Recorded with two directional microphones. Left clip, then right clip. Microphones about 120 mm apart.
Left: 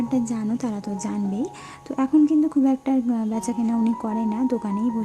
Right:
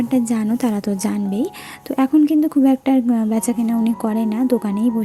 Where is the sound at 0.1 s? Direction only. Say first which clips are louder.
Right 6 dB; 35° right (ahead or behind).